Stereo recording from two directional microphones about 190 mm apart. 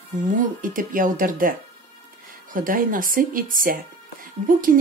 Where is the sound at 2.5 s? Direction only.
45° right (ahead or behind).